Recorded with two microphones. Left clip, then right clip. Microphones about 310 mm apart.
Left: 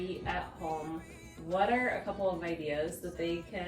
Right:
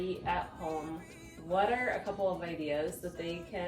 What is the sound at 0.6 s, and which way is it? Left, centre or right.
Speech, centre.